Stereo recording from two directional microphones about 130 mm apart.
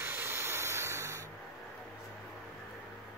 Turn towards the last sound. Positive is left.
turn(degrees=-25)  # may be behind; listen again after turning